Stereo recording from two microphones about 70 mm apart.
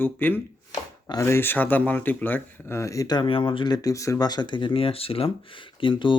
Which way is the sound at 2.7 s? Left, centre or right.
Left.